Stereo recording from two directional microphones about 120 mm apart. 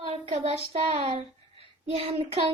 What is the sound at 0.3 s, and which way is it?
A child's voice, 50° right (ahead or behind).